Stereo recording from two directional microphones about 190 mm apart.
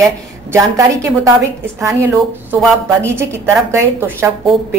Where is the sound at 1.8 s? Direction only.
15° right (ahead or behind).